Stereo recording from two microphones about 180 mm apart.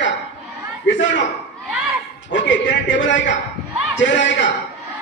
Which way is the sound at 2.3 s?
90° left.